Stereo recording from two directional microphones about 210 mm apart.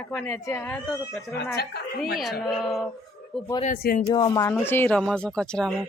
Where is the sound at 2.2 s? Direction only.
Centre (ahead or behind).